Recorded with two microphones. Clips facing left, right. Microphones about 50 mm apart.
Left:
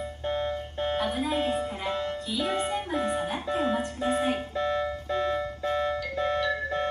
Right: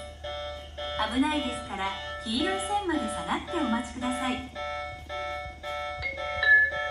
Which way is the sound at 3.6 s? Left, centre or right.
Left.